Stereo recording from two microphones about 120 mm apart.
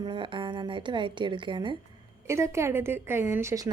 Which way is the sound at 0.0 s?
45° right (ahead or behind).